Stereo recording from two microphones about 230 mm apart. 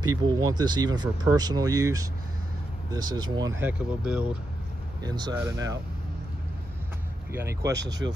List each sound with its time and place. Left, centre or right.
0.2 s speech: centre
5.0 s speech: centre
7.3 s speech: centre